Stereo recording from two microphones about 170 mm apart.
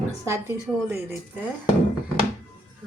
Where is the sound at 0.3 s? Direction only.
15° right (ahead or behind).